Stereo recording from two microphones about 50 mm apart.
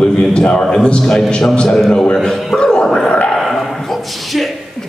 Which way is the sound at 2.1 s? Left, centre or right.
Centre.